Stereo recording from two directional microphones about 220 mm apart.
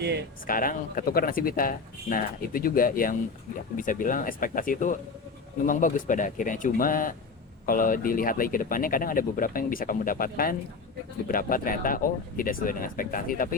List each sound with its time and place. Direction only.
0.0 s speech: 50° right (ahead or behind)
0.4 s speech: 40° left (ahead or behind)